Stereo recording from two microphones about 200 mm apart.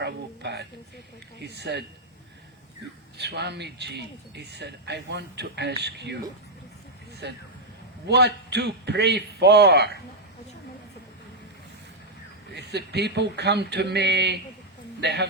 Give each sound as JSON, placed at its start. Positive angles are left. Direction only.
{"t": 0.0, "sound": "speech", "side_deg": -60}
{"t": 3.2, "sound": "speech", "side_deg": -55}
{"t": 7.2, "sound": "speech", "side_deg": -55}
{"t": 12.5, "sound": "speech", "side_deg": -55}